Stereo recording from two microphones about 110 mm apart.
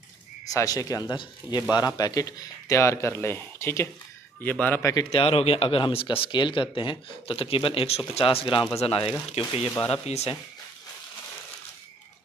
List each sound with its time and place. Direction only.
0.5 s a man's voice: 30° left (ahead or behind)
5.1 s speech: 60° left (ahead or behind)
9.4 s speech: 75° left (ahead or behind)